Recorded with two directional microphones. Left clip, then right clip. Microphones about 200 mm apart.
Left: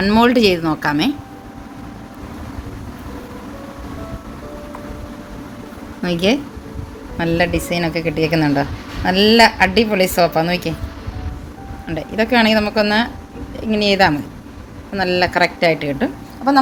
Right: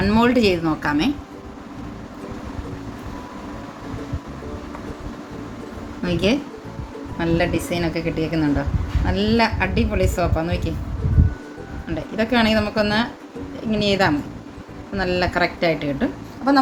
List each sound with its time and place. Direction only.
0.0 s speech: 50° left (ahead or behind)
6.1 s a woman's voice: 45° left (ahead or behind)
11.9 s a woman's voice: 40° left (ahead or behind)